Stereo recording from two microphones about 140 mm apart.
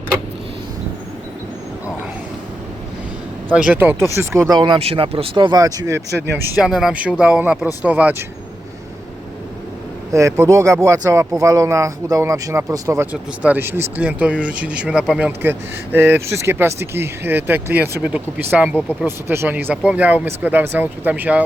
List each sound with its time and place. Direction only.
3.7 s speech: 15° right (ahead or behind)
6.6 s speech: 5° right (ahead or behind)
10.1 s speech: 20° right (ahead or behind)
13.4 s speech: 15° right (ahead or behind)